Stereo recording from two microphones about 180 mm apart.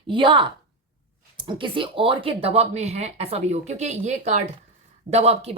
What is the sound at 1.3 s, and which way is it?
A woman's voice, 25° right (ahead or behind).